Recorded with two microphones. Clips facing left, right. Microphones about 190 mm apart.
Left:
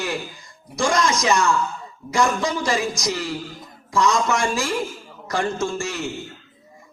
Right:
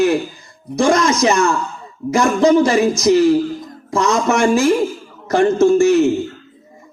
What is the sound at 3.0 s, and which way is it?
Speech, 25° right (ahead or behind).